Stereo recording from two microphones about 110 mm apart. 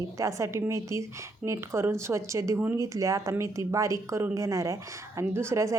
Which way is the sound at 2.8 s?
30° right (ahead or behind).